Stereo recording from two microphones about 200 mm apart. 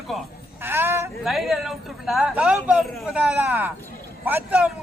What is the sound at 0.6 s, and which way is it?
Speech, 10° right (ahead or behind).